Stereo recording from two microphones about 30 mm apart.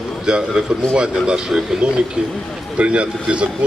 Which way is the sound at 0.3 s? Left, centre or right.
Right.